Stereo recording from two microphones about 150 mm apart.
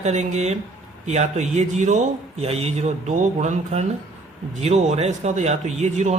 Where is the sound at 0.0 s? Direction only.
50° right (ahead or behind).